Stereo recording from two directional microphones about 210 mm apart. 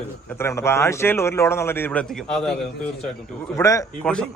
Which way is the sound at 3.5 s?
15° left (ahead or behind).